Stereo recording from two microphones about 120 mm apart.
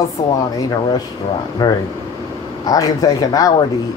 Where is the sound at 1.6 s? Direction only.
35° left (ahead or behind).